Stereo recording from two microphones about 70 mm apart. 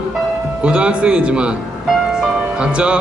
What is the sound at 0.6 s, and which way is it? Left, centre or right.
Music, centre.